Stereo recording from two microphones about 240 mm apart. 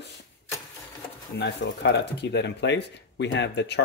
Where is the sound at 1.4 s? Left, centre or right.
Left.